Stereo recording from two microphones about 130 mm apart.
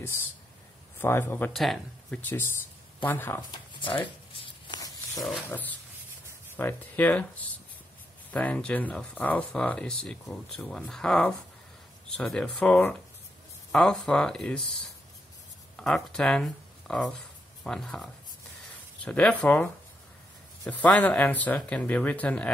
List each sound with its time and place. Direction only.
0.9 s speech: 15° left (ahead or behind)
1.5 s speech: centre (ahead or behind)
3.0 s speech: 15° left (ahead or behind)
3.5 s speech: 40° left (ahead or behind)
4.6 s a sound: 30° left (ahead or behind)
5.3 s speech: 10° left (ahead or behind)
15.7 s speech: 5° left (ahead or behind)